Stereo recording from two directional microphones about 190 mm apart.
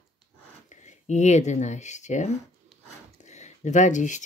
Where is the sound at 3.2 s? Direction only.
40° left (ahead or behind).